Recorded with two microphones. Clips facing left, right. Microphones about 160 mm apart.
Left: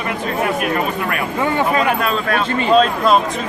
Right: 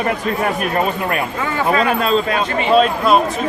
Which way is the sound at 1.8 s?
30° right (ahead or behind).